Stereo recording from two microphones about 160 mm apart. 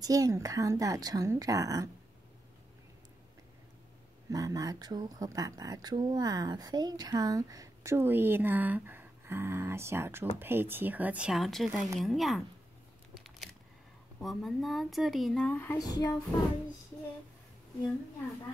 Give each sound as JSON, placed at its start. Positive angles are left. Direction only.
{"t": 0.0, "sound": "speech", "side_deg": -20}
{"t": 4.3, "sound": "speech", "side_deg": -20}
{"t": 13.1, "sound": "a sound", "side_deg": 0}
{"t": 14.2, "sound": "speech", "side_deg": 0}
{"t": 15.8, "sound": "music", "side_deg": 25}